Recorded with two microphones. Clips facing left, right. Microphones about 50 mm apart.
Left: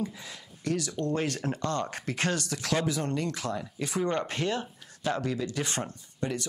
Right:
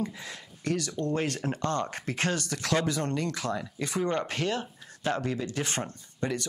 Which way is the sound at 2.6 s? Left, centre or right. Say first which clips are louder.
Right 2 dB; right.